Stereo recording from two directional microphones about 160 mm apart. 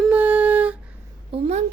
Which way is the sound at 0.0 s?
10° right (ahead or behind).